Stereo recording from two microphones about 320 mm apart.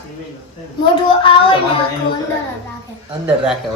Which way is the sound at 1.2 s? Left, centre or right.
Centre.